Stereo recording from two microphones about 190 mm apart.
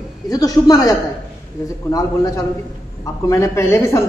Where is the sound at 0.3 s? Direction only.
20° left (ahead or behind).